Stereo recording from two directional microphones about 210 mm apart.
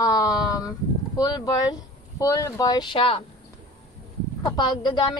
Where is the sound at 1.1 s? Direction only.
20° left (ahead or behind).